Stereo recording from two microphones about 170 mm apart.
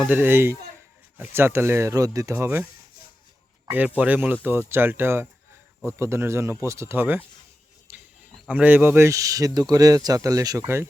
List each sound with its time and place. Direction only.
0.1 s speech: 10° right (ahead or behind)
3.7 s speech: 10° right (ahead or behind)